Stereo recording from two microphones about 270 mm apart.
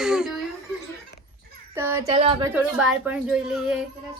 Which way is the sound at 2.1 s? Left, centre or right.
Right.